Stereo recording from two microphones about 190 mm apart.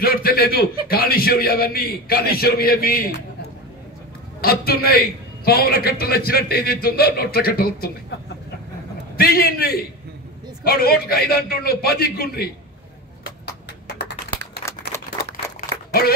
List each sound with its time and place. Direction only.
0.0 s a man's voice: 50° left (ahead or behind)
4.4 s a man's voice: 50° left (ahead or behind)
9.1 s a man's voice: 50° left (ahead or behind)
13.8 s typing: 60° left (ahead or behind)
14.9 s a sound: 15° left (ahead or behind)